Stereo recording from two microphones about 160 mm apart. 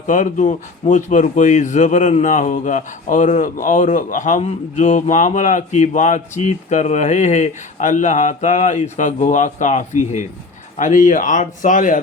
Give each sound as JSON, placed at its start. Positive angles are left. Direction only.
{"t": 0.1, "sound": "speech", "side_deg": 50}